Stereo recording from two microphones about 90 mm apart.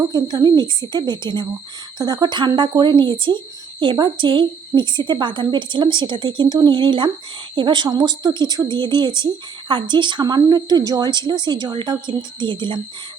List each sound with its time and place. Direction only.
0.0 s a woman's voice: 45° right (ahead or behind); by 12.8 s 65° right (ahead or behind)